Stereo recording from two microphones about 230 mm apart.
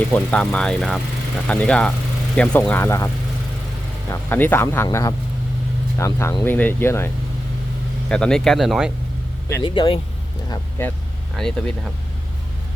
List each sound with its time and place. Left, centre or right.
0.1 s speech: centre
4.1 s speech: centre
8.1 s speech: centre
9.5 s speech: centre
10.5 s speech: centre